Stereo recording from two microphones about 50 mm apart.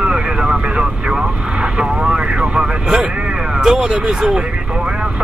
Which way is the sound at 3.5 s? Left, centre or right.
Centre.